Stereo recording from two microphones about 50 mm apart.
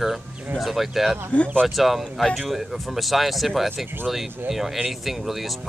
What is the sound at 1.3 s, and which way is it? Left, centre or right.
Speech, left.